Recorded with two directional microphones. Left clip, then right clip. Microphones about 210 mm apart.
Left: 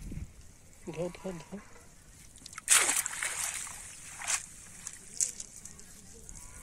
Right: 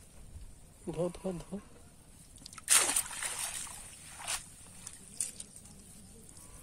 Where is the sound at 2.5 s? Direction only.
20° right (ahead or behind).